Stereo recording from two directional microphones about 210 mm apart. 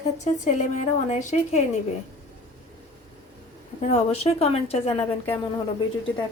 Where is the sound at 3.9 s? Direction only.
30° left (ahead or behind).